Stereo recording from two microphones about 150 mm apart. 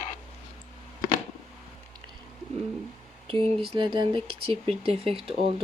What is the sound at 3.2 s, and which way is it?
Speech, 40° right (ahead or behind).